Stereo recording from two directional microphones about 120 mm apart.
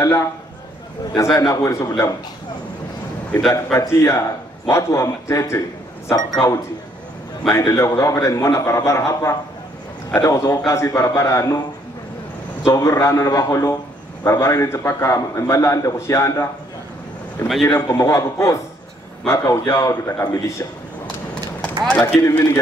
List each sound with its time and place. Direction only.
0.0 s a man's voice: 25° left (ahead or behind)
3.3 s a man's voice: 10° left (ahead or behind)
3.7 s a man's voice: 25° left (ahead or behind)
12.6 s a man's voice: 25° left (ahead or behind)
17.6 s a man's voice: 25° left (ahead or behind)
21.8 s speech: 15° left (ahead or behind)